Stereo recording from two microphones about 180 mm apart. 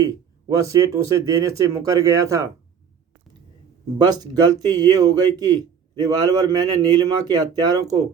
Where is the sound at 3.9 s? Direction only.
20° right (ahead or behind).